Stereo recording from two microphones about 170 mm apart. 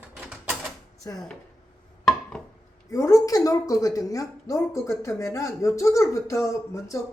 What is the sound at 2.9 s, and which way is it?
A woman's voice, 20° left (ahead or behind).